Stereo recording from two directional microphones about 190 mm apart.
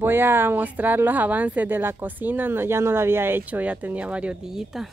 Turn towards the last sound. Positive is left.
turn(degrees=0)  # may be behind; listen again after turning